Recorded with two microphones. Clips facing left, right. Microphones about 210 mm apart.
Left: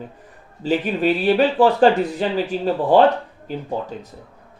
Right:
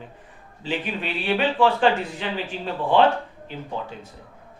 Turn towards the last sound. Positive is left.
turn(degrees=40)  # may be behind; listen again after turning